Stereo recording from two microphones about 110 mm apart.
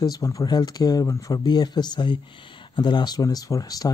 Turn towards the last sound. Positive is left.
turn(degrees=35)  # may be behind; listen again after turning